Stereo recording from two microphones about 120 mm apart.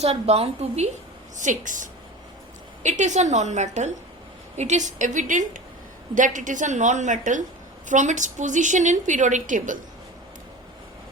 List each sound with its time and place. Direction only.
0.0 s a woman's voice: 60° right (ahead or behind)
1.4 s a woman's voice: 90° right